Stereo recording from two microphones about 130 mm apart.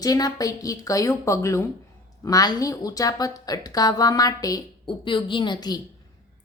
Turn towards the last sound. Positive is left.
turn(degrees=30)  # may be behind; listen again after turning